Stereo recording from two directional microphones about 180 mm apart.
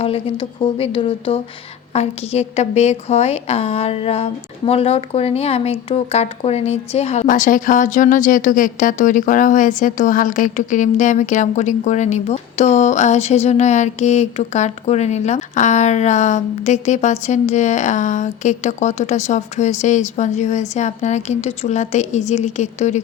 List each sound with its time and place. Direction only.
0.0 s a woman's voice: 30° left (ahead or behind)